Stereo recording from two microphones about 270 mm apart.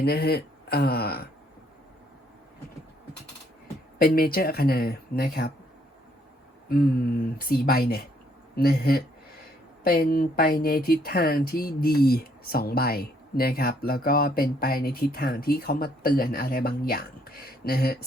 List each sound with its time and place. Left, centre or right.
0.0 s speech: left
3.9 s speech: left
6.7 s speech: left